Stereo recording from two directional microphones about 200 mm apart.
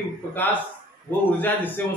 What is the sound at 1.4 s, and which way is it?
Speech, 10° left (ahead or behind).